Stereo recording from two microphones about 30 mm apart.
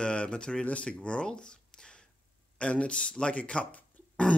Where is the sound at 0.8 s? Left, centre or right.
Left.